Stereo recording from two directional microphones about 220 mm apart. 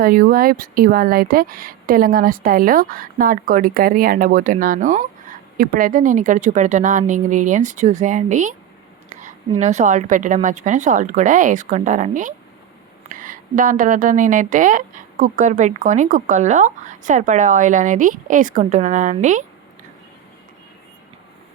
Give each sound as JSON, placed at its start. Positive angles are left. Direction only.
{"t": 0.0, "sound": "speech", "side_deg": -40}